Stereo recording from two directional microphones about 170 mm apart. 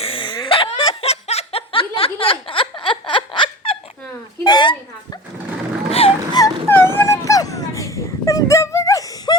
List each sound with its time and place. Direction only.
0.0 s laughter: 30° left (ahead or behind)
4.4 s a sound: 25° left (ahead or behind)
5.9 s vehicle: 35° left (ahead or behind)
6.4 s dog: 15° left (ahead or behind)